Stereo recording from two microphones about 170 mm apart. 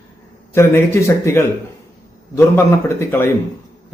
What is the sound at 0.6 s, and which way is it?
A man's voice, 15° left (ahead or behind).